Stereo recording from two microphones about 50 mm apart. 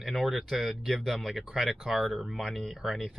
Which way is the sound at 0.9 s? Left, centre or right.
Centre.